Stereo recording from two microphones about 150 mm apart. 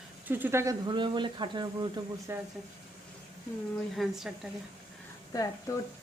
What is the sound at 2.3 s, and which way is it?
Speech, 15° right (ahead or behind).